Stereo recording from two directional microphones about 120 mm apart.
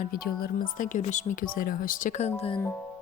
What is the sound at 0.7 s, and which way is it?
Speech, 90° left.